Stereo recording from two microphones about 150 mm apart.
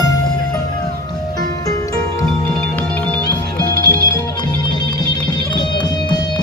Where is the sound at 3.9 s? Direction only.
25° left (ahead or behind).